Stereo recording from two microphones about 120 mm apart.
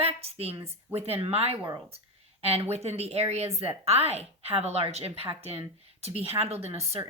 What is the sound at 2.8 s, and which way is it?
A woman's voice, 60° right (ahead or behind).